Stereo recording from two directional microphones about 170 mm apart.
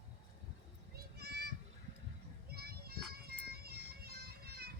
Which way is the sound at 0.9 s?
70° right (ahead or behind).